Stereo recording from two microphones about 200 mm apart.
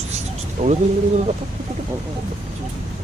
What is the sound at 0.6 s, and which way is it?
Speech, 30° right (ahead or behind).